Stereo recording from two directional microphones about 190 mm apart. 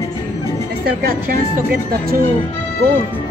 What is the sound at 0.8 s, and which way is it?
Speech, 50° right (ahead or behind).